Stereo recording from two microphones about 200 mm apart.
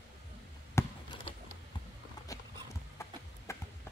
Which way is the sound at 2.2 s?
15° left (ahead or behind).